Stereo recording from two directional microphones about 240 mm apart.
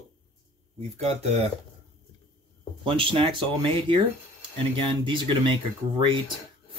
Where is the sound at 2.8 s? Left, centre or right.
Right.